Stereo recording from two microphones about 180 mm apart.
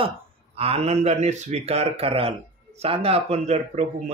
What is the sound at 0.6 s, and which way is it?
A man's voice, 35° right (ahead or behind).